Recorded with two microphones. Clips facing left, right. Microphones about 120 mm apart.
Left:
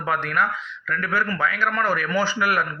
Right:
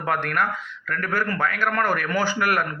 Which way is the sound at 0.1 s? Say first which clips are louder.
Even; 50° right (ahead or behind).